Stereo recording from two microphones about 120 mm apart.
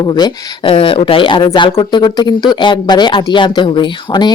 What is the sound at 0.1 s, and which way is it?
A woman's voice, 40° left (ahead or behind).